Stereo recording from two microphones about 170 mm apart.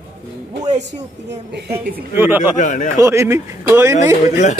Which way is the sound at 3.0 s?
15° right (ahead or behind).